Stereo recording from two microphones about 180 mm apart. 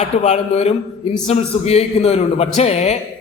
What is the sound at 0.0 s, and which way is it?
A man's voice, 40° left (ahead or behind).